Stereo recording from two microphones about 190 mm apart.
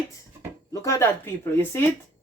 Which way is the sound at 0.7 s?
15° left (ahead or behind).